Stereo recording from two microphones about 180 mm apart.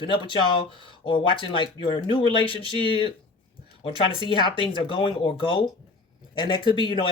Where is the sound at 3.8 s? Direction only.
30° left (ahead or behind).